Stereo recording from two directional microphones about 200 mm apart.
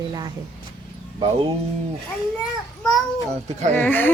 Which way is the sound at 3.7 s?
10° left (ahead or behind).